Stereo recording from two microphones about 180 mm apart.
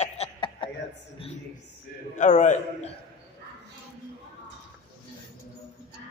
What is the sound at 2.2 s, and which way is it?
Speech, 45° left (ahead or behind).